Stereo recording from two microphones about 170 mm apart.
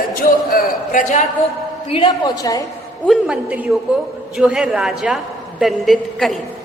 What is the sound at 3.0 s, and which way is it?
A woman's voice, centre (ahead or behind).